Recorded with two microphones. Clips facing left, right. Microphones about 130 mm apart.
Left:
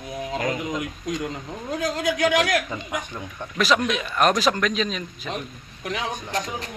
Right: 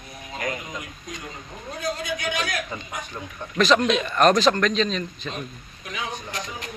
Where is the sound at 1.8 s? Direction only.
90° left.